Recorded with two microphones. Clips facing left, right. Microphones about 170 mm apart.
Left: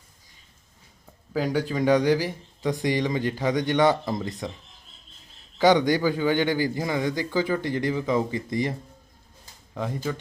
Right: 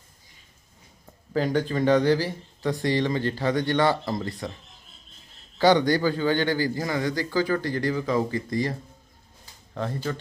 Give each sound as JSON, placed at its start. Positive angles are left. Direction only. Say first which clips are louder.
{"t": 1.3, "sound": "a man's voice", "louder": "right 1 dB", "side_deg": 10}
{"t": 9.7, "sound": "speech", "louder": "even", "side_deg": 10}